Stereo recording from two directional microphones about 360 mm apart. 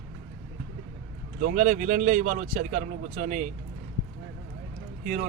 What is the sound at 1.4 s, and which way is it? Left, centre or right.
Speech, right.